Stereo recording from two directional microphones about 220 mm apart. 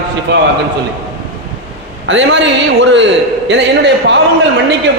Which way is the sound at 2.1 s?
55° right (ahead or behind).